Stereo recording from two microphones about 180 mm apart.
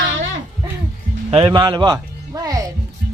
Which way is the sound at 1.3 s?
25° right (ahead or behind).